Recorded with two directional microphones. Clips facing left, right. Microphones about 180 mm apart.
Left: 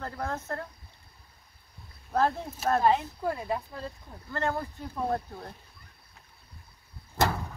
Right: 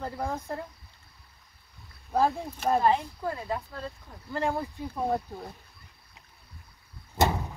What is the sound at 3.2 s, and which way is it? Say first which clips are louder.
Speech: left 1 dB; 10° left (ahead or behind).